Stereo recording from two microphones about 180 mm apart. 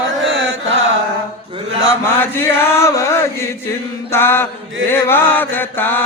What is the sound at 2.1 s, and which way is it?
Chant, 10° left (ahead or behind).